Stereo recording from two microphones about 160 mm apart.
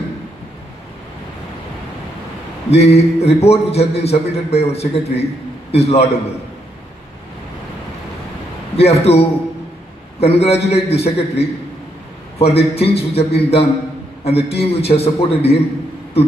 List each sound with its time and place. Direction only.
2.7 s a man's voice: 40° left (ahead or behind)
8.7 s a man's voice: 40° left (ahead or behind)